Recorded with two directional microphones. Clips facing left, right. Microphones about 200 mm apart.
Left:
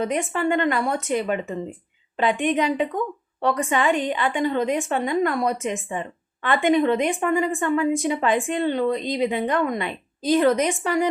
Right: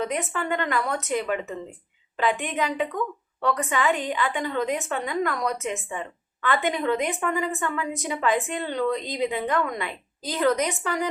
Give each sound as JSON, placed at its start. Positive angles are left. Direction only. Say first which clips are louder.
{"t": 0.1, "sound": "speech", "louder": "left 5 dB", "side_deg": 25}